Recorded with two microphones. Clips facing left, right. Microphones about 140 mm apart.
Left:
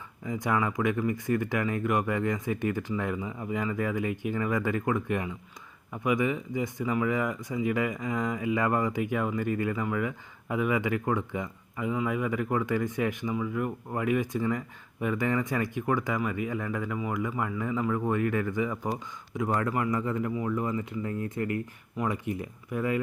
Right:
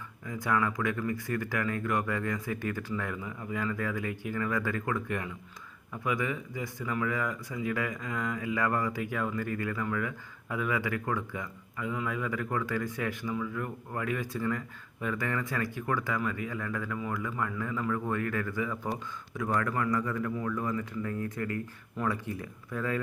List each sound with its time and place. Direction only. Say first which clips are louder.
0.3 s speech: left 2 dB; 20° left (ahead or behind)